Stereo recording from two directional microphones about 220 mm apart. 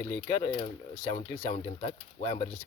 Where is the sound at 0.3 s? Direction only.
20° left (ahead or behind).